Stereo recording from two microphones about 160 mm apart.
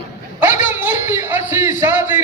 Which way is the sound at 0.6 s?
15° right (ahead or behind).